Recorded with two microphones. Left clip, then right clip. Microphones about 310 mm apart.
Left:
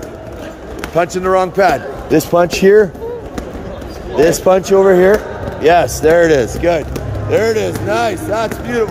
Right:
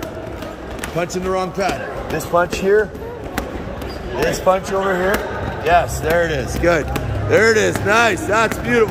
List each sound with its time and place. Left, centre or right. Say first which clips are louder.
0.9 s speech: left 8 dB; centre
2.1 s speech: left 6 dB; left
4.3 s speech: left 4 dB; left
6.6 s speech: left 2 dB; centre